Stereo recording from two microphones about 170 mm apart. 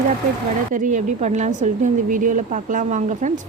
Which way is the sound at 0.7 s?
50° right (ahead or behind).